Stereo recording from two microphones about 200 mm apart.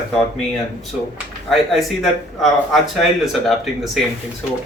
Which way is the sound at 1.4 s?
Centre (ahead or behind).